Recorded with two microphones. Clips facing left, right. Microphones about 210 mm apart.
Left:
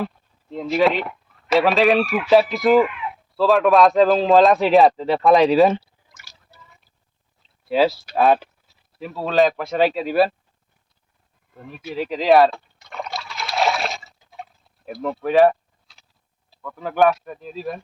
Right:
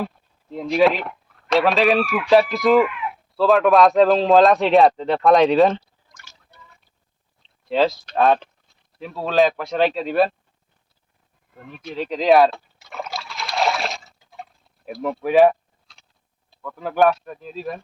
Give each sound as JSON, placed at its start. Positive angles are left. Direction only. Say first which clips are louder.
{"t": 0.5, "sound": "a man's voice", "louder": "right 1 dB", "side_deg": 0}
{"t": 7.4, "sound": "speech", "louder": "left 1 dB", "side_deg": 5}
{"t": 11.7, "sound": "liquid", "louder": "left 1 dB", "side_deg": 5}
{"t": 16.5, "sound": "a man's voice", "louder": "even", "side_deg": 0}